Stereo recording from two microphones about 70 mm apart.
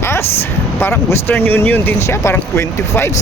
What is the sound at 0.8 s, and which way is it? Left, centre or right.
Speech, left.